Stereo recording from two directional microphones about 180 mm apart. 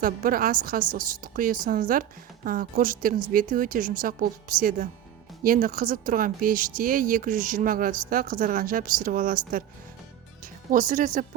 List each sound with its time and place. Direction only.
0.0 s speech: 50° right (ahead or behind)